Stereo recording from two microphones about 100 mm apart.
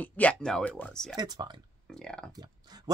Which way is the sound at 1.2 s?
45° right (ahead or behind).